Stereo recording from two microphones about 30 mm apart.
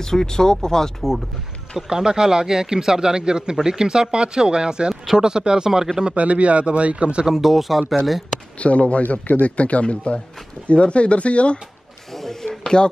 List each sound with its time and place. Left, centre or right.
0.0 s speech: centre
1.9 s speech: right
5.7 s speech: centre
6.1 s speech: right
7.2 s speech: centre
8.5 s a man's voice: left
12.1 s a sound: centre
12.6 s speech: left